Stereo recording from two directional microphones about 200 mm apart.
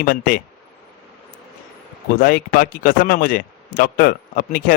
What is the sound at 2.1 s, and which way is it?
A man's voice, 45° left (ahead or behind).